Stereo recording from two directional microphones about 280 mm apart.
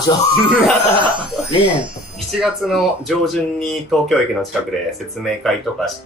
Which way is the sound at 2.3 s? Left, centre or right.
Centre.